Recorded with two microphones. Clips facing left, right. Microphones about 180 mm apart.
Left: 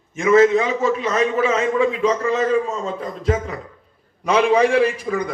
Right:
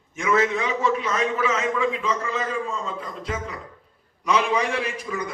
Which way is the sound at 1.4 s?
30° left (ahead or behind).